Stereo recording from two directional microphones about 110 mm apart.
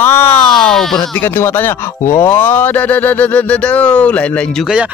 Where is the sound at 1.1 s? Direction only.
20° left (ahead or behind).